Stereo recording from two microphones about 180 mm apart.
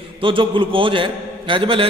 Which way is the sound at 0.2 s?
30° right (ahead or behind).